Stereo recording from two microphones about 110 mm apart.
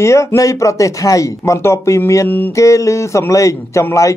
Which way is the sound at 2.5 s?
30° left (ahead or behind).